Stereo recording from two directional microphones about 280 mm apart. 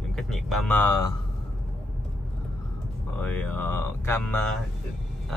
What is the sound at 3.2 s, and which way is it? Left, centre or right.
Speech, centre.